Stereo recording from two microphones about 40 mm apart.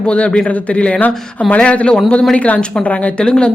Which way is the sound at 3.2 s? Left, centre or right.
Left.